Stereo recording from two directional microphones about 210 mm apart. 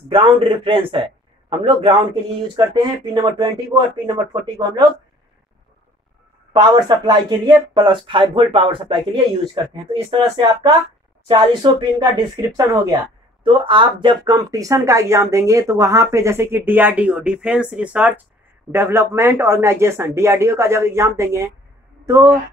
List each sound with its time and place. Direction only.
0.1 s speech: 25° right (ahead or behind)
6.5 s speech: 20° right (ahead or behind)